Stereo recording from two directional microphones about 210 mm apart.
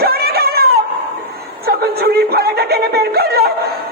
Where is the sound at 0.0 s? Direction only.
50° right (ahead or behind).